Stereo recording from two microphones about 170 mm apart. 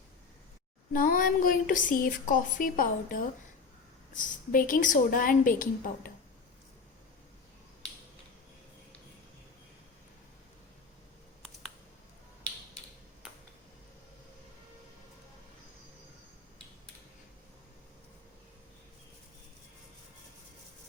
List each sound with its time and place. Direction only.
0.9 s a woman's voice: 55° left (ahead or behind)